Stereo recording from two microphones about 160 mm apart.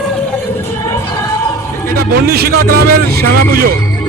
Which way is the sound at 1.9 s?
75° right (ahead or behind).